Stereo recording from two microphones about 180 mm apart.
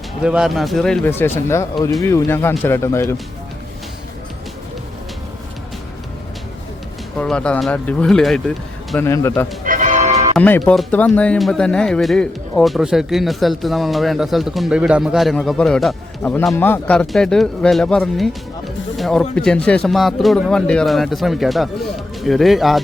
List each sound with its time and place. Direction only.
0.2 s speech: 5° right (ahead or behind); by 3.2 s 15° left (ahead or behind)
7.2 s speech: 5° left (ahead or behind)
9.0 s speech: 15° left (ahead or behind)
9.6 s music: 45° right (ahead or behind)
10.3 s speech: 5° left (ahead or behind)